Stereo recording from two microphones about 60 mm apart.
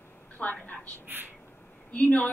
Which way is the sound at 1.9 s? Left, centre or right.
Left.